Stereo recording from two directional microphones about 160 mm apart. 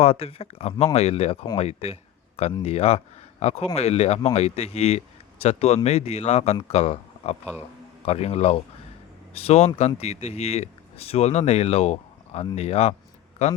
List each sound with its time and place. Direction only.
0.0 s a man's voice: 40° left (ahead or behind)